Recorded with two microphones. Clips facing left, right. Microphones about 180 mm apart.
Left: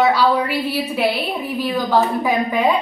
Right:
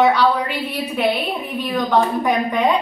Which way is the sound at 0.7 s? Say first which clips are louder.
Even; 5° left (ahead or behind).